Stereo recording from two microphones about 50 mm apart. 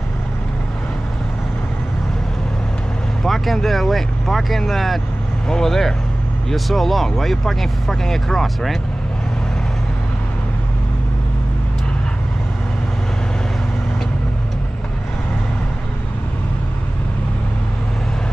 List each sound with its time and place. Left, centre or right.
3.3 s speech: centre